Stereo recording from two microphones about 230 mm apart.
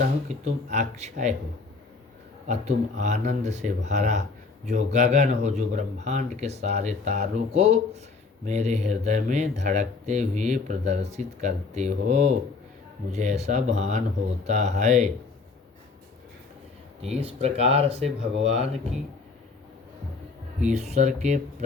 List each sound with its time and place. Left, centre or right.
0.0 s speech: right
2.5 s speech: right
17.0 s speech: right
20.7 s speech: right